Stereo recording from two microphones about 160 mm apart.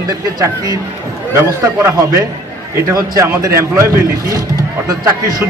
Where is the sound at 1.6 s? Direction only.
20° right (ahead or behind).